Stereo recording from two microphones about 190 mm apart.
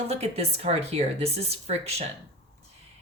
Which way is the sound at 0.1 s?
35° right (ahead or behind).